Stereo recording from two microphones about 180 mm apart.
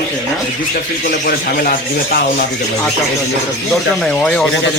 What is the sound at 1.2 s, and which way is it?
Speech, 55° left (ahead or behind).